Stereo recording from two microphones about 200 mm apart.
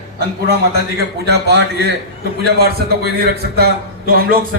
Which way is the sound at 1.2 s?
55° right (ahead or behind).